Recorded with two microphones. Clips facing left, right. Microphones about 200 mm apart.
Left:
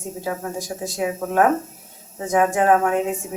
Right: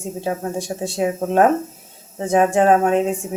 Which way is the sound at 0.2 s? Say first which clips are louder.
Right 4 dB; 30° right (ahead or behind).